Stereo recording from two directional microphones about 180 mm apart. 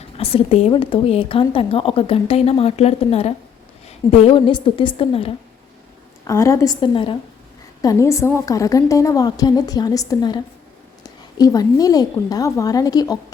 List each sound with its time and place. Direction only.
0.2 s a woman's voice: 35° left (ahead or behind)
6.2 s a woman's voice: 15° left (ahead or behind)